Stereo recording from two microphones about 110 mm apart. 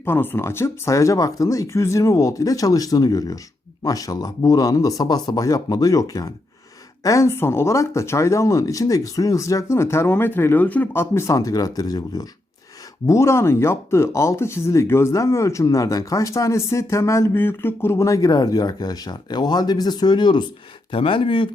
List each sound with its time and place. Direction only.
0.0 s speech: 20° left (ahead or behind); by 20.5 s 45° left (ahead or behind)
20.9 s speech: 55° left (ahead or behind)